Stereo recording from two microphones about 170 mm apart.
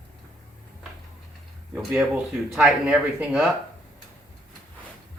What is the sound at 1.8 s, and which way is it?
Speech, 5° right (ahead or behind).